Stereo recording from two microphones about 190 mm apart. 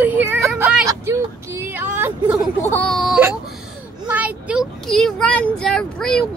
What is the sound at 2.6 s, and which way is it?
Whimper, 10° left (ahead or behind).